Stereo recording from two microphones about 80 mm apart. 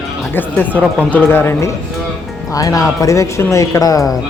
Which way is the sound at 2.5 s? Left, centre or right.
Left.